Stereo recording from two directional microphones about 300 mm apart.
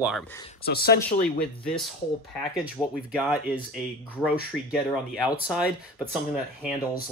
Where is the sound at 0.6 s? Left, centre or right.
Left.